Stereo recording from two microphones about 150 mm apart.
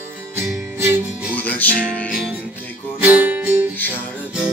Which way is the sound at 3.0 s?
10° right (ahead or behind).